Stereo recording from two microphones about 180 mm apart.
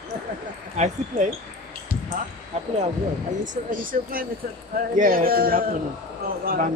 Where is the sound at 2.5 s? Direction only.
35° right (ahead or behind).